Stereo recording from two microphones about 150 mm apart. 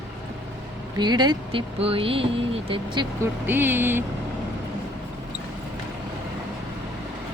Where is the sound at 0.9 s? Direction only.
30° right (ahead or behind).